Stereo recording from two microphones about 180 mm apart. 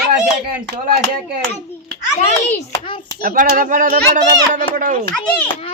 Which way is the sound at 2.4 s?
30° left (ahead or behind).